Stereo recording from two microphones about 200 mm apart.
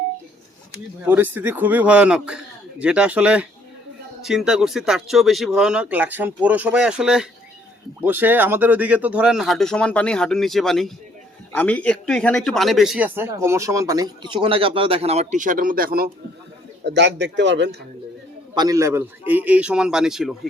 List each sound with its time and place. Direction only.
1.0 s speech: 10° right (ahead or behind); by 16.0 s 45° right (ahead or behind)
16.8 s a man's voice: 60° right (ahead or behind)
18.5 s speech: 20° right (ahead or behind); by 20.5 s centre (ahead or behind)